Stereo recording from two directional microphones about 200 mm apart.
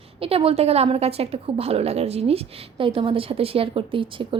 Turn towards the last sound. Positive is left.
turn(degrees=-25)  # may be behind; listen again after turning